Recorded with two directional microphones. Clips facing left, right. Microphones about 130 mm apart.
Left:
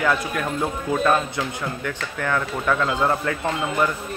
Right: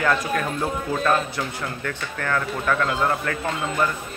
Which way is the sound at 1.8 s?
15° left (ahead or behind).